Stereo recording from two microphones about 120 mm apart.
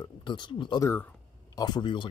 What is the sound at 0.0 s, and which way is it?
Speech, 40° left (ahead or behind).